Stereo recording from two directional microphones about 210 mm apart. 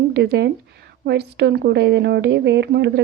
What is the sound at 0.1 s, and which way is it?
A woman's voice, 55° right (ahead or behind).